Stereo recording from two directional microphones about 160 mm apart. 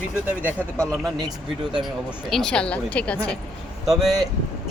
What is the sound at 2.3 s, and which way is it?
A woman's voice, 5° left (ahead or behind).